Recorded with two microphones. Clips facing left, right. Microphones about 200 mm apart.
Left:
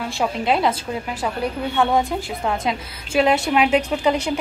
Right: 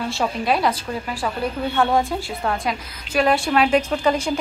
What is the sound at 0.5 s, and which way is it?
Speech, 20° left (ahead or behind).